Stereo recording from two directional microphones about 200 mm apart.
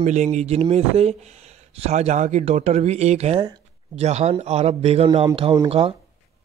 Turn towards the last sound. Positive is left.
turn(degrees=-30)  # may be behind; listen again after turning